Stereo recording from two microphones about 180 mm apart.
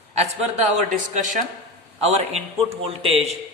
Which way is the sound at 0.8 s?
45° right (ahead or behind).